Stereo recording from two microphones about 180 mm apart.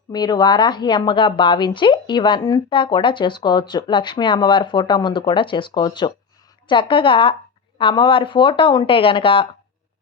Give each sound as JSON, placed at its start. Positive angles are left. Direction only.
{"t": 0.1, "sound": "a woman's voice", "side_deg": 20}